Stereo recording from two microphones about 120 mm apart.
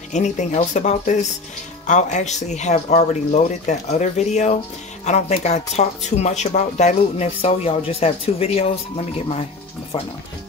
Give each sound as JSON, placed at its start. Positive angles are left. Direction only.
{"t": 0.1, "sound": "speech", "side_deg": 85}